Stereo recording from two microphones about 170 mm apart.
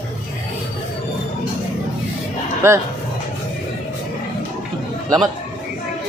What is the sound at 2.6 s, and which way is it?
Speech, 15° right (ahead or behind).